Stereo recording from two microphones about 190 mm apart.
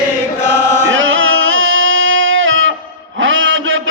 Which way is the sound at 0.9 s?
90° right.